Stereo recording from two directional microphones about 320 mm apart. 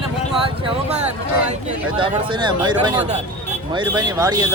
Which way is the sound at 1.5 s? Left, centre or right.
Centre.